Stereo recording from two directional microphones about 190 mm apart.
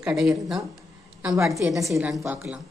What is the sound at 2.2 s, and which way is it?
Speech, 15° right (ahead or behind).